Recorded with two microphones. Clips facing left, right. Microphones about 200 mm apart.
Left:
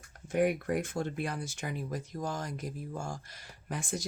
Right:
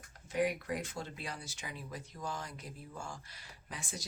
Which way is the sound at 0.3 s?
50° left (ahead or behind).